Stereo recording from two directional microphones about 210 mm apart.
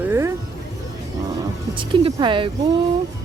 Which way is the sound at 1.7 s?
25° right (ahead or behind).